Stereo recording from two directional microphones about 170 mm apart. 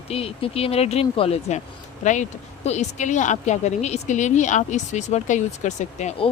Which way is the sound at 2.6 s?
45° left (ahead or behind).